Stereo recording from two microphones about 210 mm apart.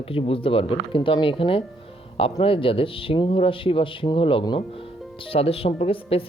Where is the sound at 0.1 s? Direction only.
25° left (ahead or behind).